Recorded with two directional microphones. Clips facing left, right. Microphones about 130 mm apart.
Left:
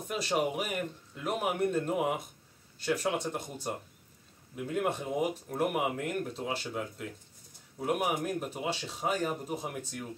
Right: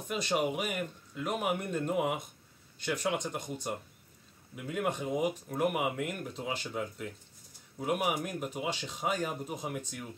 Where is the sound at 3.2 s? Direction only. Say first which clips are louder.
Left 1 dB; 5° left (ahead or behind).